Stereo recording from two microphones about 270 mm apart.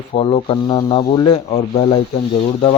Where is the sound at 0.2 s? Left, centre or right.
Centre.